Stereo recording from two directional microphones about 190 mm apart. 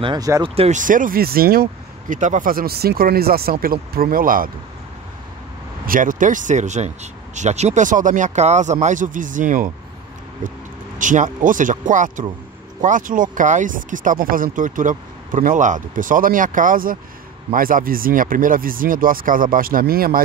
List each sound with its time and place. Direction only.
0.0 s speech: 20° right (ahead or behind)
0.6 s speech: 40° right (ahead or behind)
5.9 s speech: 45° right (ahead or behind)